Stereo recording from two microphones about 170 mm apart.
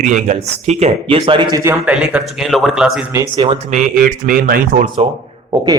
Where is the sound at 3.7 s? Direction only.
50° right (ahead or behind).